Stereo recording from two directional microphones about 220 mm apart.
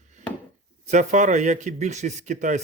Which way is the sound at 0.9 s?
35° right (ahead or behind).